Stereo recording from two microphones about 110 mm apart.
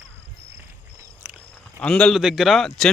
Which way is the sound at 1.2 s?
15° right (ahead or behind).